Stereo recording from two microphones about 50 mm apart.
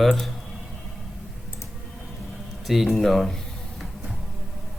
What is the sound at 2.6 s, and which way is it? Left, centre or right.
Speech, centre.